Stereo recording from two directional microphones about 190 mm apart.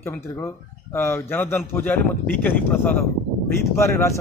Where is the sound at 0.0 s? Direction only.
10° left (ahead or behind).